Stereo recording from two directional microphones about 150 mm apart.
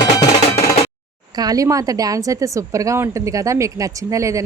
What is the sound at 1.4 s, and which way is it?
A woman's voice, 25° right (ahead or behind).